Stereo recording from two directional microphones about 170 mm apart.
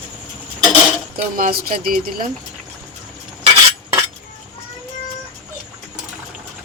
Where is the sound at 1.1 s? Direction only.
60° right (ahead or behind).